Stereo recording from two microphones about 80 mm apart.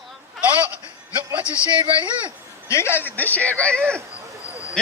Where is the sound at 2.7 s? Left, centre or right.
Left.